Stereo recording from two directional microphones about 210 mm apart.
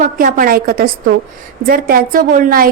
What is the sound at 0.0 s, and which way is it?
A woman's voice, 40° right (ahead or behind).